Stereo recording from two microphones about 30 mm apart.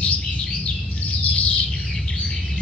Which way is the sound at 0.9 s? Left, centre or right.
Left.